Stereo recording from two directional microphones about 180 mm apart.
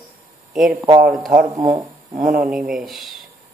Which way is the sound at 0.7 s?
20° right (ahead or behind).